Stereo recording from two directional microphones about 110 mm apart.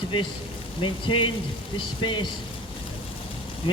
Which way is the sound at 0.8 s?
50° left (ahead or behind).